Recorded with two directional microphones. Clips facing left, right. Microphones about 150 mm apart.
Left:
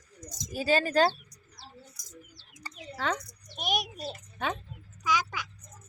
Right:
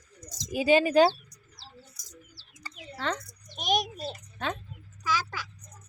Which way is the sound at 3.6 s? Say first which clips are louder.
Right 4 dB; 10° left (ahead or behind).